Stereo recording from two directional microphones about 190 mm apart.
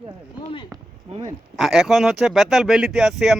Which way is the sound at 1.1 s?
35° right (ahead or behind).